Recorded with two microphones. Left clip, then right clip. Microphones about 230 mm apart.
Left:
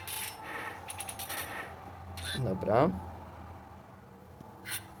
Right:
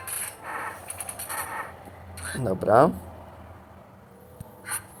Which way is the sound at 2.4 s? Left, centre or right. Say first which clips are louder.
Right 9 dB; centre.